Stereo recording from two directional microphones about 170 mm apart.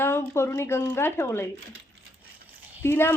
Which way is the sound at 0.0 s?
15° left (ahead or behind).